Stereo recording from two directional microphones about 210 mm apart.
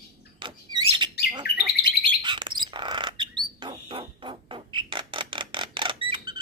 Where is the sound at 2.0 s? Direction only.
20° right (ahead or behind).